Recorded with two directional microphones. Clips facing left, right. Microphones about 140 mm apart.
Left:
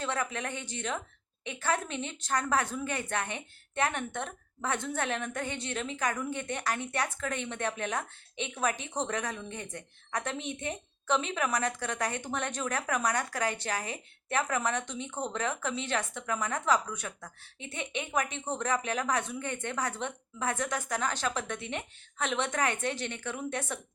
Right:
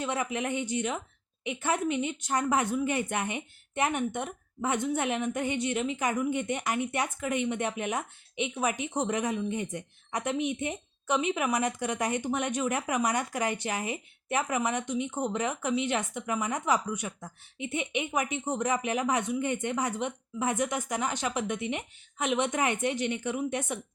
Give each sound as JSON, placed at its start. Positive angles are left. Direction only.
{"t": 0.0, "sound": "a woman's voice", "side_deg": -15}